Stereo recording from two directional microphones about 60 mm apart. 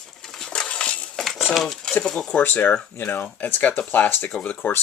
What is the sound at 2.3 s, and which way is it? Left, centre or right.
Speech, left.